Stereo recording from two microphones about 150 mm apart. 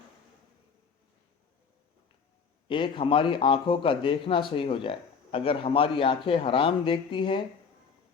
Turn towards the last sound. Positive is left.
turn(degrees=35)  # may be behind; listen again after turning